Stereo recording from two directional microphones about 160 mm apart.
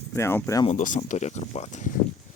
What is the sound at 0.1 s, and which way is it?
Speech, 15° left (ahead or behind).